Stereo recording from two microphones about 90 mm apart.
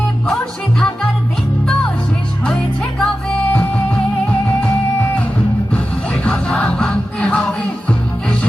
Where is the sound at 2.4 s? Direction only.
5° left (ahead or behind).